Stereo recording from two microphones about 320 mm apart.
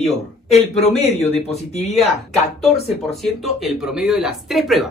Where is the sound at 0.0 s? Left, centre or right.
Centre.